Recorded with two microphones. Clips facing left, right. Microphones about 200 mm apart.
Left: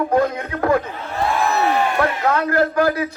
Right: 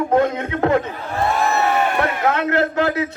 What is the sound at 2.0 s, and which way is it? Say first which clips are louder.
A man's voice: even; 25° right (ahead or behind).